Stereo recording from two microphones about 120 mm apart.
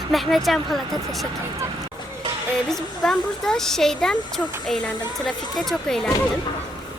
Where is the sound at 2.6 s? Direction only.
5° left (ahead or behind).